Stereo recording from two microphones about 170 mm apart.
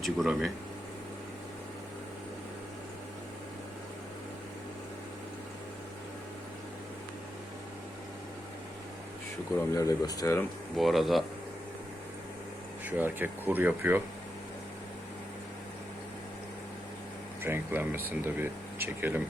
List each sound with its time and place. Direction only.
0.0 s speech: centre (ahead or behind)
9.6 s speech: 20° left (ahead or behind)
10.8 s speech: centre (ahead or behind)
12.8 s speech: 10° right (ahead or behind)
17.4 s speech: 10° right (ahead or behind)